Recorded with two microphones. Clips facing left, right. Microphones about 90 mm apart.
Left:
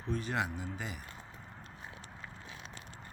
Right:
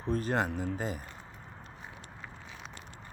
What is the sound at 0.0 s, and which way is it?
Speech, 40° right (ahead or behind).